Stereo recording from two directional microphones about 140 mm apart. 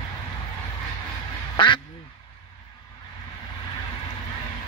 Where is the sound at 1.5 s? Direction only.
35° left (ahead or behind).